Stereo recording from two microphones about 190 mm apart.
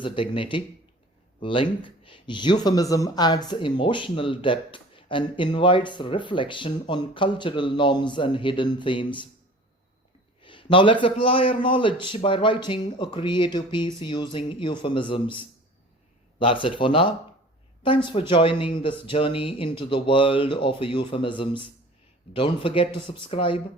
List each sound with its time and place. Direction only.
0.0 s speech: 25° left (ahead or behind)
10.4 s speech: 25° left (ahead or behind)